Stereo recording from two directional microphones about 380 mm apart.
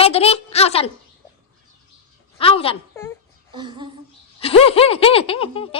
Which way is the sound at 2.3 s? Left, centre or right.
Centre.